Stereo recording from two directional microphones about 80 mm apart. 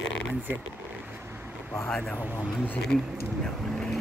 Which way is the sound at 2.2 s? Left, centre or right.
Centre.